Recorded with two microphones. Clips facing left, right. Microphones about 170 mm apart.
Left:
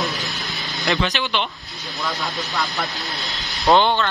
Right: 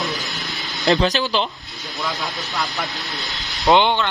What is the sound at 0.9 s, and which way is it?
Speech, 40° right (ahead or behind).